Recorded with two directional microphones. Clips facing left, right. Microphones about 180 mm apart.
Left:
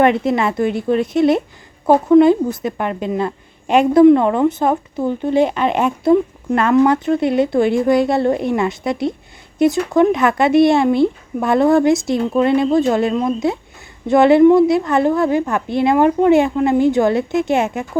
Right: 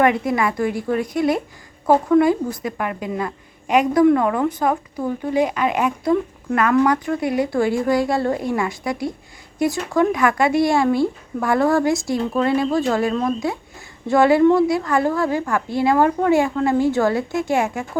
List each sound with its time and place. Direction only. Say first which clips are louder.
0.0 s a woman's voice: left 3 dB; 25° left (ahead or behind)